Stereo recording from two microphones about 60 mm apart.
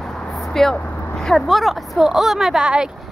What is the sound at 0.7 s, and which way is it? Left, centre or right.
Vehicle, left.